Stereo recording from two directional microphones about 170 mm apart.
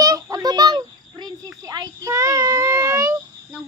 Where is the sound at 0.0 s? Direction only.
20° right (ahead or behind).